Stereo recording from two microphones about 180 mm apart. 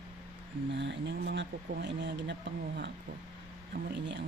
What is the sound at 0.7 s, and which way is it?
Speech, 85° right.